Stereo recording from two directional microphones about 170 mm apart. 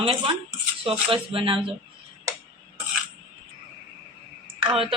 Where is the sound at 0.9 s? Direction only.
30° right (ahead or behind).